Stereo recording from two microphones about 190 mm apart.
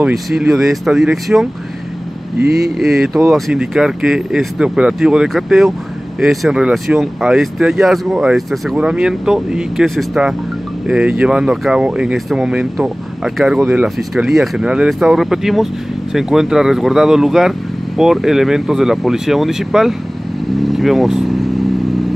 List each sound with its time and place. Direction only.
0.0 s speech: centre (ahead or behind)
2.4 s speech: 55° right (ahead or behind)
2.8 s speech: centre (ahead or behind)